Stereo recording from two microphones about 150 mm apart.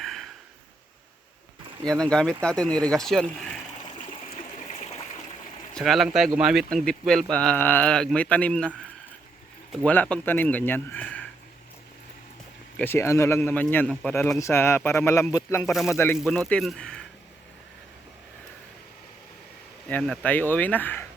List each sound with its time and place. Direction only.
0.0 s a sound: centre (ahead or behind)
1.9 s speech: 5° left (ahead or behind)
4.7 s stream: 45° left (ahead or behind)
5.7 s speech: centre (ahead or behind)
12.8 s speech: 15° left (ahead or behind)
16.1 s speech: centre (ahead or behind)
19.9 s speech: 10° left (ahead or behind)